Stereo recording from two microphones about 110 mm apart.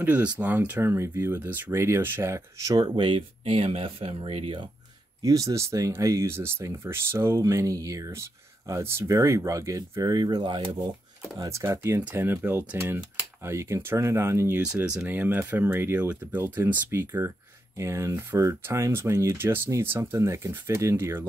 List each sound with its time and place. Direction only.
0.0 s speech: 15° right (ahead or behind); by 2.9 s 30° right (ahead or behind)
3.0 s speech: 50° right (ahead or behind)
5.2 s speech: 30° right (ahead or behind)
11.3 s speech: 30° right (ahead or behind)
14.6 s speech: 10° right (ahead or behind)